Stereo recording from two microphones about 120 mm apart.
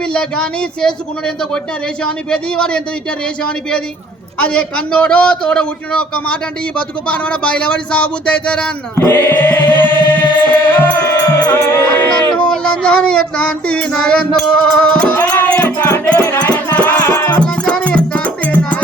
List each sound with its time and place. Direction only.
0.1 s a man's voice: 5° left (ahead or behind)
2.0 s a man's voice: 10° left (ahead or behind)
4.4 s a man's voice: 10° left (ahead or behind)
10.8 s music: 15° left (ahead or behind)
17.3 s music: 5° left (ahead or behind)